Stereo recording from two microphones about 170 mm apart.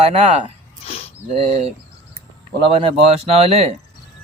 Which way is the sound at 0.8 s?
35° left (ahead or behind).